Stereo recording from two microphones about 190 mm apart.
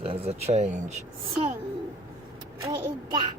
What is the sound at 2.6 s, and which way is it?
Speech, 25° right (ahead or behind).